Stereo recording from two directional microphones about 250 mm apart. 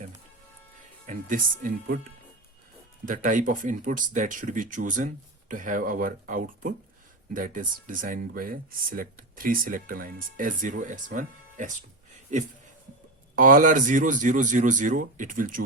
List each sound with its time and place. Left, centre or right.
1.0 s speech: right
3.1 s speech: right
13.3 s speech: right